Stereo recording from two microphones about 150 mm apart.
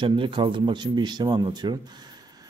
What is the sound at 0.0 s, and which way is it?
A man's voice, 30° right (ahead or behind).